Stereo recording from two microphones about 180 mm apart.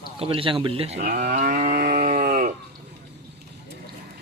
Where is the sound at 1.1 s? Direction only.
45° right (ahead or behind).